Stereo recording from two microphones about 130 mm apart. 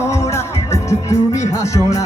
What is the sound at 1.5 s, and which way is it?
Music, 25° left (ahead or behind).